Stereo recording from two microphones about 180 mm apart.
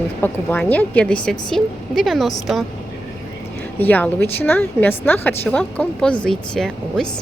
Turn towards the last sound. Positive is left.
turn(degrees=5)  # may be behind; listen again after turning